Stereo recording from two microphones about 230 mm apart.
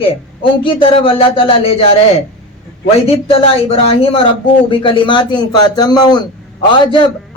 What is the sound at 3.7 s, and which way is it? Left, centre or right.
A man's voice, left.